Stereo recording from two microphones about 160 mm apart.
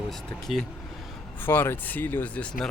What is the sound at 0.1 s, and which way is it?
Speech, centre (ahead or behind).